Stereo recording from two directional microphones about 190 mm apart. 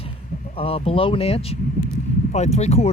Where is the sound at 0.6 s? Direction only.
30° left (ahead or behind).